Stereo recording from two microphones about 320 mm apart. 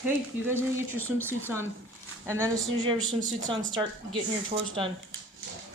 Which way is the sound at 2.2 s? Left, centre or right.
Centre.